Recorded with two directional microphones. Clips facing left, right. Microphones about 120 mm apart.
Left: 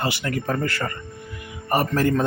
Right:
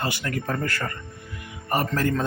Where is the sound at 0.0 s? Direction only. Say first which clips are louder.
Left 3 dB; 20° left (ahead or behind).